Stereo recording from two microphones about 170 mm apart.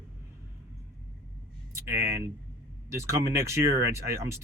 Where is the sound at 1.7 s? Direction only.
15° right (ahead or behind).